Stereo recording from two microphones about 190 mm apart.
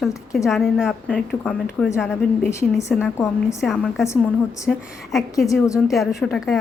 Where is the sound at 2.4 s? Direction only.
15° left (ahead or behind).